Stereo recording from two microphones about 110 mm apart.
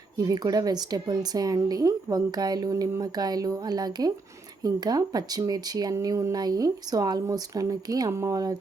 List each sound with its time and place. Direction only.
0.2 s speech: 35° right (ahead or behind)